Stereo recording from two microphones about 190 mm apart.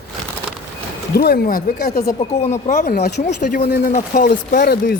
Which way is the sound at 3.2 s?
40° left (ahead or behind).